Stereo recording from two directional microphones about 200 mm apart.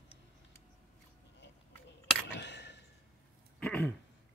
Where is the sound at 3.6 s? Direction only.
5° left (ahead or behind).